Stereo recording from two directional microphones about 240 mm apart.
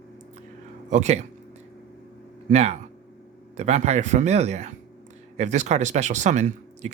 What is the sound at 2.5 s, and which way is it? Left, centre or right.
Speech, right.